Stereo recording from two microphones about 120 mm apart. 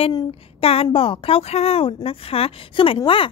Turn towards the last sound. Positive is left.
turn(degrees=45)  # may be behind; listen again after turning